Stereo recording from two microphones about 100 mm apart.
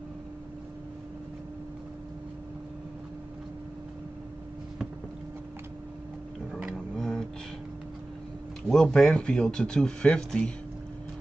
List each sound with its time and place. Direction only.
6.7 s tick-tock: 5° left (ahead or behind)
8.6 s speech: 5° left (ahead or behind)